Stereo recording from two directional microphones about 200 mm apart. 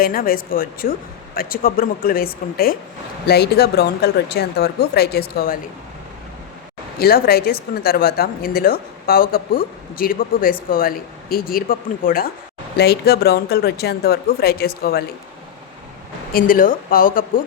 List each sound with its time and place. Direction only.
0.0 s speech: 45° left (ahead or behind)
7.0 s speech: 50° left (ahead or behind)
16.3 s speech: 45° left (ahead or behind)